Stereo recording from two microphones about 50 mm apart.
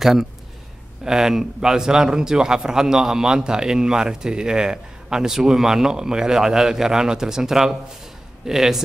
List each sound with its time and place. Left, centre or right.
0.0 s a man's voice: centre